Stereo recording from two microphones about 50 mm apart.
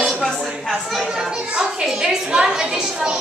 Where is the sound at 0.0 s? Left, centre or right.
Centre.